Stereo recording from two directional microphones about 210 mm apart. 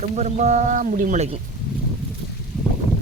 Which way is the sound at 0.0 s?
30° right (ahead or behind).